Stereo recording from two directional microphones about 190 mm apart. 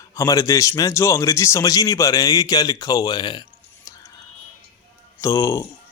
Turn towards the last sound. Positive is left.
turn(degrees=15)  # may be behind; listen again after turning